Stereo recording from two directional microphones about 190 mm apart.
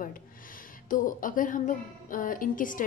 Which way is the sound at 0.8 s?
45° left (ahead or behind).